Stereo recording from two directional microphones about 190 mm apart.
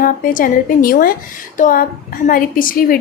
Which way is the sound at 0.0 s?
45° left (ahead or behind).